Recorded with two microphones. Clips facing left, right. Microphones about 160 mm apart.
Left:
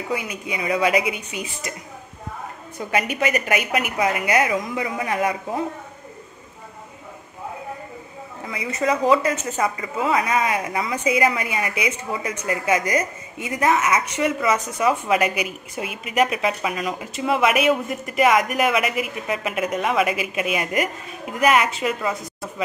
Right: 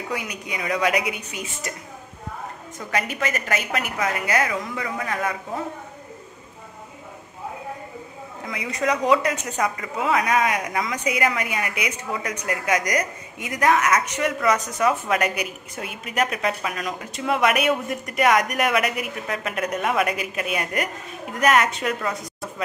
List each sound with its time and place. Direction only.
0.1 s a man's voice: 5° left (ahead or behind)
2.9 s a woman's voice: 15° left (ahead or behind)
8.5 s a man's voice: centre (ahead or behind)